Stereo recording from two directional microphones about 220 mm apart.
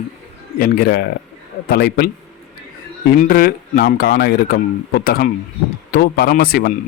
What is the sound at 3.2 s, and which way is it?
Speech, 40° left (ahead or behind).